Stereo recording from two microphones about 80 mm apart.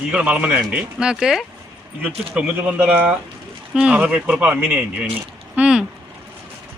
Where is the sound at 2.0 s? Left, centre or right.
Centre.